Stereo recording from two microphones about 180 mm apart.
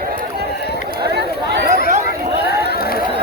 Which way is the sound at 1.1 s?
65° right (ahead or behind).